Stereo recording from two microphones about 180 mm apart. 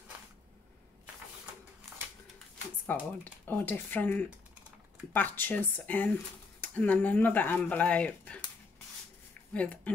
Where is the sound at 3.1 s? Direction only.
10° left (ahead or behind).